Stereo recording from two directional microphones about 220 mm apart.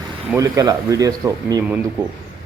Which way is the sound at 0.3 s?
15° right (ahead or behind).